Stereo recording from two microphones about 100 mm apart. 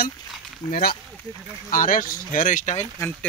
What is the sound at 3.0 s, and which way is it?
Speech, 30° left (ahead or behind).